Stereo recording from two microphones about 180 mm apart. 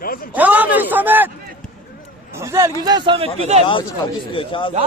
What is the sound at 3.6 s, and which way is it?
A man's voice, 30° left (ahead or behind).